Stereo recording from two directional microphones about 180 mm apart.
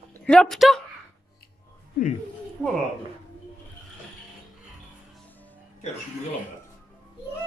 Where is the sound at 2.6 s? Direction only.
5° right (ahead or behind).